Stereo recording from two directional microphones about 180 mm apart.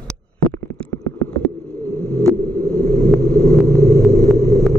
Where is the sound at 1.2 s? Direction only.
10° left (ahead or behind).